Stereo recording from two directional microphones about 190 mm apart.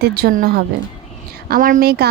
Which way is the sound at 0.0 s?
55° right (ahead or behind).